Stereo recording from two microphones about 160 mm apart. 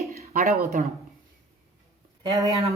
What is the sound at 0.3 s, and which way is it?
Speech, 60° right (ahead or behind).